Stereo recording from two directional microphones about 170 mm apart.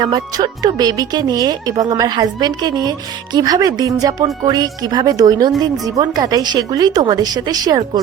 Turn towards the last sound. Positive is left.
turn(degrees=-20)  # may be behind; listen again after turning